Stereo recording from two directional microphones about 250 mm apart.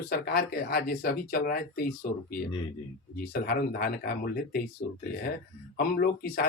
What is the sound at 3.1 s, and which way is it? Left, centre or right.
Speech, left.